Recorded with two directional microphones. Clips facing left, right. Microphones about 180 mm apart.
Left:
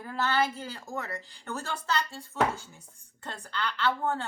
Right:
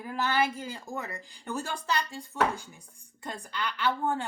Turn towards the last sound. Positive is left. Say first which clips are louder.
# even
turn(degrees=-15)  # may be behind; listen again after turning